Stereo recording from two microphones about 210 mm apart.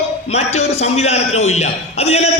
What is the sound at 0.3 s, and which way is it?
A man's voice, 30° left (ahead or behind).